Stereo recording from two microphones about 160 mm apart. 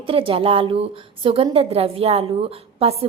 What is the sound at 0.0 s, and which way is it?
A woman's voice, 35° right (ahead or behind).